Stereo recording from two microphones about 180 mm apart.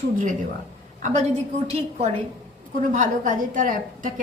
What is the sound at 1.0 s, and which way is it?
A woman's voice, 40° right (ahead or behind).